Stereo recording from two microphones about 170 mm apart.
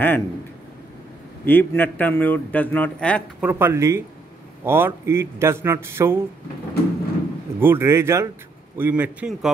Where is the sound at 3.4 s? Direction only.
10° right (ahead or behind).